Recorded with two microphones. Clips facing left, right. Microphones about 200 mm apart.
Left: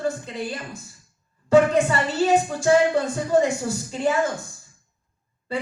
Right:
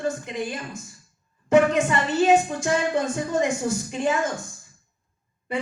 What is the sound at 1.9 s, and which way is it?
Speech, 20° right (ahead or behind).